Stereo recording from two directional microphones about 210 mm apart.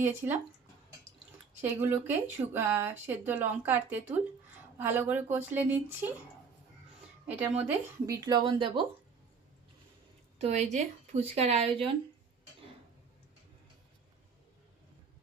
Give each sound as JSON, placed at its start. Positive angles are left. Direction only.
{"t": 0.0, "sound": "speech", "side_deg": -10}
{"t": 1.8, "sound": "speech", "side_deg": -10}
{"t": 7.3, "sound": "speech", "side_deg": -10}
{"t": 10.3, "sound": "speech", "side_deg": -30}